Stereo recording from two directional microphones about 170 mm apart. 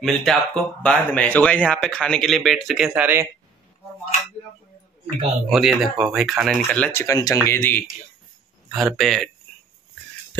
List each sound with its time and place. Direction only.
0.0 s speech: centre (ahead or behind)
5.0 s speech: centre (ahead or behind); by 7.8 s 15° left (ahead or behind)
8.7 s speech: centre (ahead or behind)